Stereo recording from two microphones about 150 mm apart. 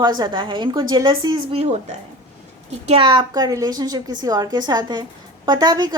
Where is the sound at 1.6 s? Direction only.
45° right (ahead or behind).